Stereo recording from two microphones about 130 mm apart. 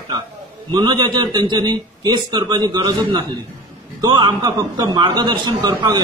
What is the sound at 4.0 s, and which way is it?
A man's voice, 35° right (ahead or behind).